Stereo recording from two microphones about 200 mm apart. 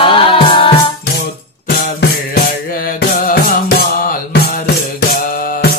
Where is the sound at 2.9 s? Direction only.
50° left (ahead or behind).